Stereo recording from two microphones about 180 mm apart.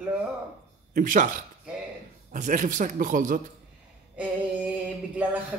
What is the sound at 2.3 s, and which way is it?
A man's voice, 45° right (ahead or behind).